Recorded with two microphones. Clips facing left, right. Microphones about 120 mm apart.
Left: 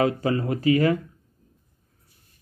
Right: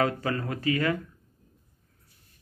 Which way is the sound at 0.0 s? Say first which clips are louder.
Left 5 dB; 25° left (ahead or behind).